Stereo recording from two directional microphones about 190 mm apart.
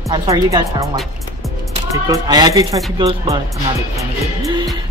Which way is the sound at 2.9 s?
30° right (ahead or behind).